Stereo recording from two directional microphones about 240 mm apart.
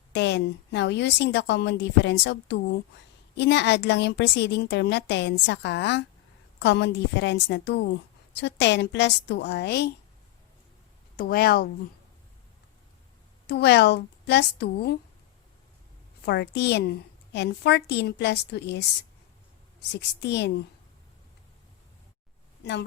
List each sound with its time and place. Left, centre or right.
0.1 s a woman's voice: left
11.2 s speech: left
13.5 s a woman's voice: left
16.2 s a woman's voice: left
20.0 s a woman's voice: left
22.6 s speech: left